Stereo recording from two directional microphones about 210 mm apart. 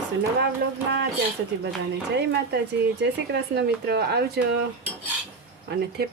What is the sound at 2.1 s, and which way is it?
Speech, 55° right (ahead or behind).